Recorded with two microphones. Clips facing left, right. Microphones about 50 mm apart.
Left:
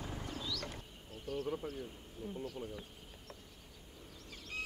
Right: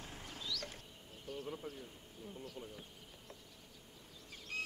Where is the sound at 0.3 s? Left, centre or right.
Left.